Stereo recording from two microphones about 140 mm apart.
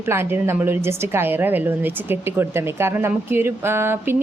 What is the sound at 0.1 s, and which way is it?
A woman's voice, 15° right (ahead or behind).